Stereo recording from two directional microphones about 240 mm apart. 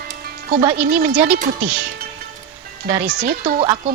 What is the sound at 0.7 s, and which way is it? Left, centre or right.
Speech, right.